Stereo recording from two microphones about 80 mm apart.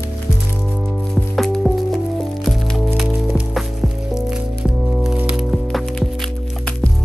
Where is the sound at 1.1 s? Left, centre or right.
Centre.